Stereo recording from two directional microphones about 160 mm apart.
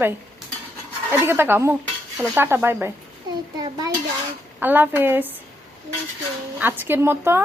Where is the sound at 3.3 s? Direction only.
25° right (ahead or behind).